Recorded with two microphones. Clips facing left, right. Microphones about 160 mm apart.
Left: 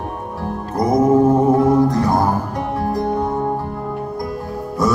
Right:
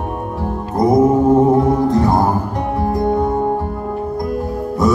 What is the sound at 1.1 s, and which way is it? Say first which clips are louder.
Music: right 1 dB; 20° right (ahead or behind).